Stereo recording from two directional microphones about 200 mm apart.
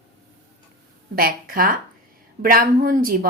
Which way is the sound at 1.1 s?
45° right (ahead or behind).